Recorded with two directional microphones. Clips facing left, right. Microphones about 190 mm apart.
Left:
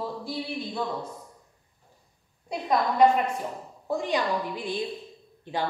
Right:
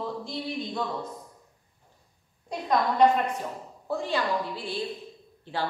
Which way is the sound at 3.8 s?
15° left (ahead or behind).